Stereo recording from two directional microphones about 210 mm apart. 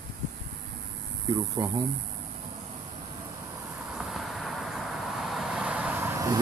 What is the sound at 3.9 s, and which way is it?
Vehicle, 5° right (ahead or behind).